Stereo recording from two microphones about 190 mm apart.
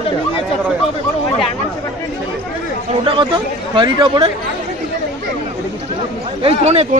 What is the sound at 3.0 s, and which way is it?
Speech, 25° right (ahead or behind).